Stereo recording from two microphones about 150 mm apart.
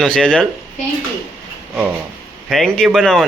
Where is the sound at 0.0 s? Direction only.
5° left (ahead or behind).